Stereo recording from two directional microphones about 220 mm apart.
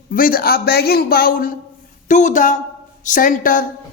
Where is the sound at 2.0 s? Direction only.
35° left (ahead or behind).